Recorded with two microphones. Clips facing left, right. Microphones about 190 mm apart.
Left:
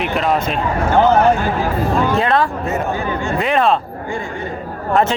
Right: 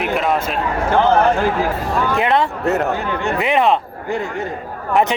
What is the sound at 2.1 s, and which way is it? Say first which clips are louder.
Speech: left 1 dB; 20° right (ahead or behind).